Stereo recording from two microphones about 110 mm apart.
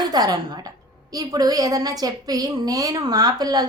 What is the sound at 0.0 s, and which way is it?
A woman's voice, 35° right (ahead or behind).